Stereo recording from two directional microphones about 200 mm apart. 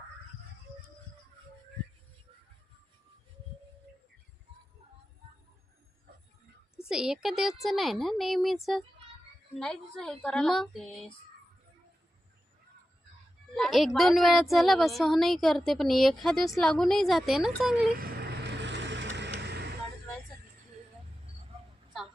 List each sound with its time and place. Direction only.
6.8 s speech: 5° right (ahead or behind)
9.6 s speech: 5° left (ahead or behind)
13.6 s speech: centre (ahead or behind)
18.0 s vehicle: 55° right (ahead or behind)